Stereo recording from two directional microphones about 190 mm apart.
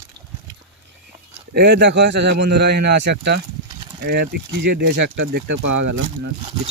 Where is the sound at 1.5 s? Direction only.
65° right (ahead or behind).